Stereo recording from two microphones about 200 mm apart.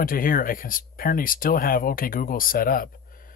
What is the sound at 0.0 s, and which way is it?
Speech, 45° left (ahead or behind).